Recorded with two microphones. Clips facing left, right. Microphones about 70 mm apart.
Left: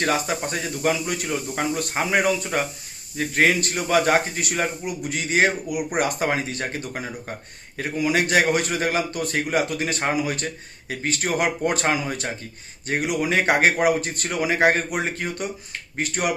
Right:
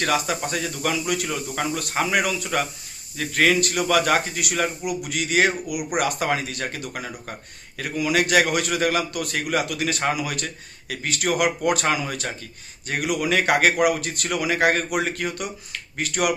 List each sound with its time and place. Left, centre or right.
0.0 s a man's voice: left
1.9 s speech: centre
2.1 s a man's voice: left